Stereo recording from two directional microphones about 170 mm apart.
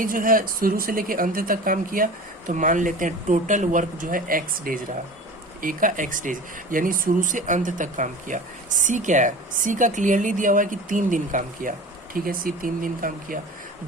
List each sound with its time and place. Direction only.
0.0 s speech: 55° right (ahead or behind)